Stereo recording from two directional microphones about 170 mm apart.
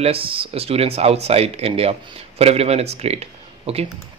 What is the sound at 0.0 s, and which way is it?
Speech, 35° right (ahead or behind).